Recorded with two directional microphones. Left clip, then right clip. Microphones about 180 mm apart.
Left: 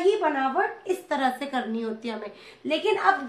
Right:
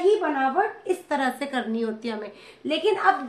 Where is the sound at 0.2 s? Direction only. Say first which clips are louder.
Right 1 dB; 25° right (ahead or behind).